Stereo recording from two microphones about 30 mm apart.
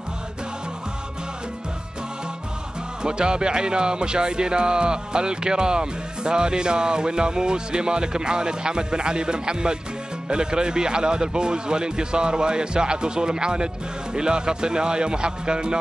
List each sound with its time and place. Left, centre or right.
3.0 s speech: right